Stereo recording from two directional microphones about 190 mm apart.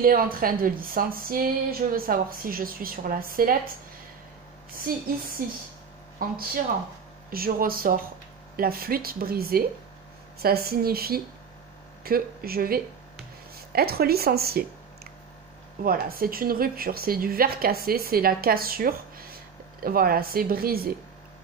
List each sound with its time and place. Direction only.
0.0 s speech: 50° right (ahead or behind)
4.7 s speech: 50° right (ahead or behind)
15.8 s speech: 50° right (ahead or behind)